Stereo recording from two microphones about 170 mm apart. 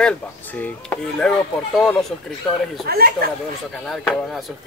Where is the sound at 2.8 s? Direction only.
65° right (ahead or behind).